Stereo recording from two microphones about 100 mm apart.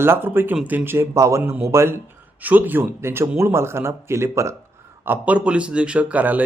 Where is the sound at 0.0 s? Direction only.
20° right (ahead or behind).